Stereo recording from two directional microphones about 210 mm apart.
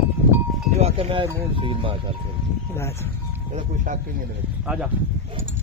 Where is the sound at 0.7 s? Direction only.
30° right (ahead or behind).